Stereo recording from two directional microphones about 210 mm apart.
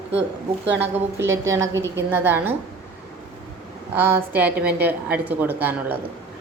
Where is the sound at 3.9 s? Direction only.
10° right (ahead or behind).